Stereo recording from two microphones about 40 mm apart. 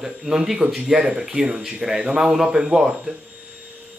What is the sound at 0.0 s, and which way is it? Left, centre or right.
Speech, centre.